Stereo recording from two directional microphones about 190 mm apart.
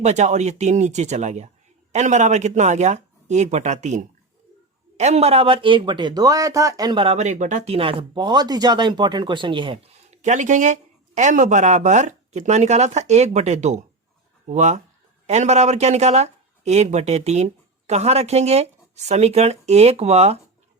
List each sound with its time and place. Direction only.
0.0 s speech: 40° right (ahead or behind)